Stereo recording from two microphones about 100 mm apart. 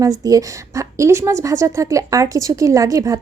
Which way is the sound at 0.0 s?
35° right (ahead or behind).